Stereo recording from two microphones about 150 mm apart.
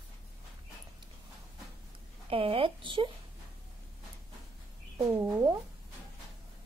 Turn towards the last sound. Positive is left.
turn(degrees=-20)  # may be behind; listen again after turning